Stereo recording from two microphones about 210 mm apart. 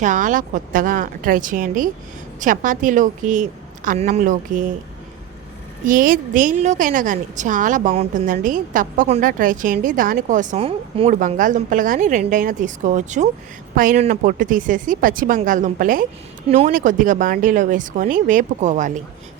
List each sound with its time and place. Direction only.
0.0 s a woman's voice: 35° right (ahead or behind)
5.8 s a woman's voice: 40° right (ahead or behind)